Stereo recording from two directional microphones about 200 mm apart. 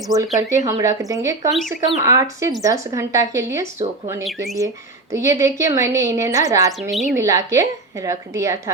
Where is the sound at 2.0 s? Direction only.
15° right (ahead or behind).